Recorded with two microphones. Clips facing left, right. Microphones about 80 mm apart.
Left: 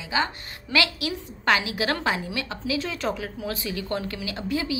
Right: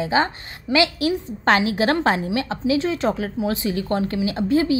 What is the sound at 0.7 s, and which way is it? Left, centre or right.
Speech, centre.